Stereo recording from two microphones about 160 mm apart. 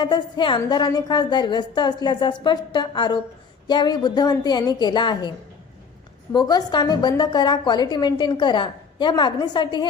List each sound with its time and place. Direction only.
0.0 s a woman's voice: 30° left (ahead or behind)
6.3 s a woman's voice: 25° left (ahead or behind)